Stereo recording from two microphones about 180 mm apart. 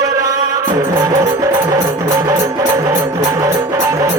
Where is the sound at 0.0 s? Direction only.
20° right (ahead or behind).